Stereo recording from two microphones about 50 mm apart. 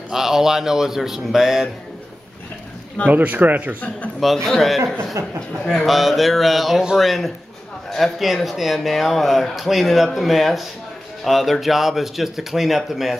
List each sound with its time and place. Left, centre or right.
0.1 s a man's voice: centre
3.1 s speech: right
4.2 s speech: centre